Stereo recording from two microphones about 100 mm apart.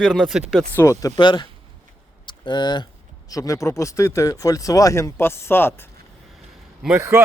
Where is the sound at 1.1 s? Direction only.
50° left (ahead or behind).